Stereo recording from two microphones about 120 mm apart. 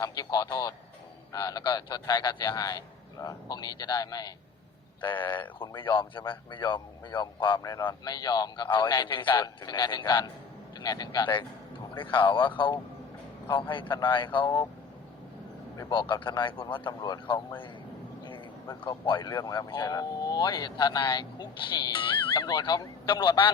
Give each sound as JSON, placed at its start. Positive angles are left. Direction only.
{"t": 0.0, "sound": "speech", "side_deg": 30}
{"t": 4.9, "sound": "a man's voice", "side_deg": 40}
{"t": 15.9, "sound": "speech", "side_deg": 40}
{"t": 18.9, "sound": "speech", "side_deg": 40}